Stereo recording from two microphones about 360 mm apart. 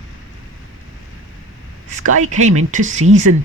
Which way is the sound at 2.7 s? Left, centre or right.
Right.